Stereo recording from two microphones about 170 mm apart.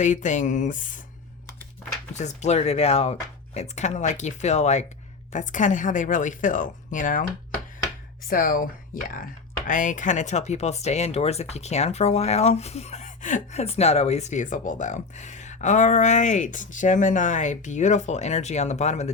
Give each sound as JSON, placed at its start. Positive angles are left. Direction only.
{"t": 0.0, "sound": "speech", "side_deg": 45}
{"t": 2.1, "sound": "speech", "side_deg": 45}
{"t": 8.3, "sound": "speech", "side_deg": 55}